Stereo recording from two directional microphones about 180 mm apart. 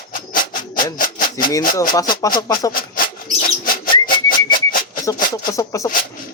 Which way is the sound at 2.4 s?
20° left (ahead or behind).